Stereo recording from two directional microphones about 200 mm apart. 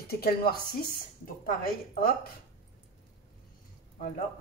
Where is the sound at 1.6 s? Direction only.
45° left (ahead or behind).